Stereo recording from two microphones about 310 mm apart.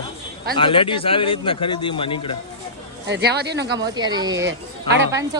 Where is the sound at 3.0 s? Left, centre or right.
Right.